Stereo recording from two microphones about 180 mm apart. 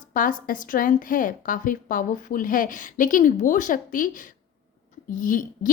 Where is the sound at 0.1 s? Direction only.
50° left (ahead or behind).